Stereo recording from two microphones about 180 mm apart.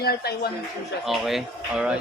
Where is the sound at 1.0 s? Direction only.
Centre (ahead or behind).